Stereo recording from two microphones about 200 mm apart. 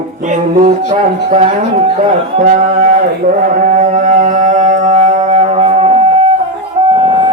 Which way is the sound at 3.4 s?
40° right (ahead or behind).